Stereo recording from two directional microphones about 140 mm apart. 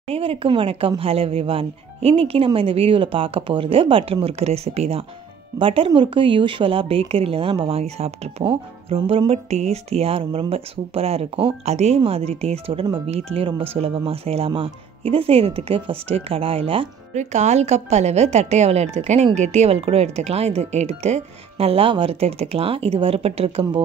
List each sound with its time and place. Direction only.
0.1 s a woman's voice: 45° right (ahead or behind)
17.1 s a woman's voice: 55° right (ahead or behind)